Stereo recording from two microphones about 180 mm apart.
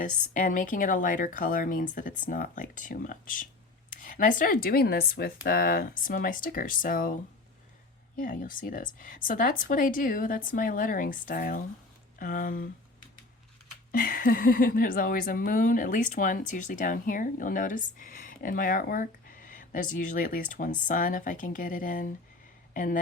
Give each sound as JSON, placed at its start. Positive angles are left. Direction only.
{"t": 0.0, "sound": "speech", "side_deg": 45}
{"t": 13.9, "sound": "speech", "side_deg": 50}